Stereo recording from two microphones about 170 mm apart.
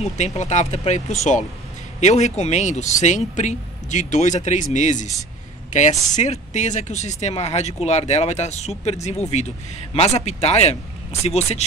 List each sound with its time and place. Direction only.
0.2 s speech: 45° left (ahead or behind)